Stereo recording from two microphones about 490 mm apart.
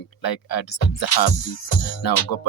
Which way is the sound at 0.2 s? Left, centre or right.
Left.